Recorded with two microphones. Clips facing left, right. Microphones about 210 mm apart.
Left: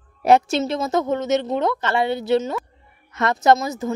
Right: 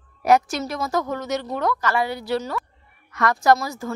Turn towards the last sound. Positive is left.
turn(degrees=20)  # may be behind; listen again after turning